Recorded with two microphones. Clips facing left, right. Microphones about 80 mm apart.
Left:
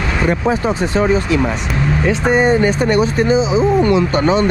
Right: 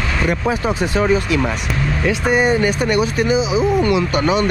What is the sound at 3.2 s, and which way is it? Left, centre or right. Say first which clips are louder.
Speech: left 3 dB; centre.